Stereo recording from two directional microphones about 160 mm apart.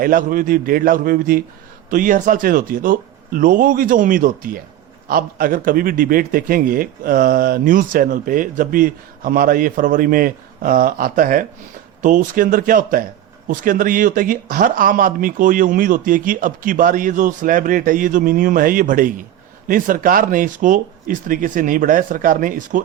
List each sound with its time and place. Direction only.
0.0 s a man's voice: 60° right (ahead or behind)